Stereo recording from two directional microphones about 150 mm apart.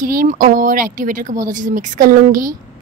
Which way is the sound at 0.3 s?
60° right (ahead or behind).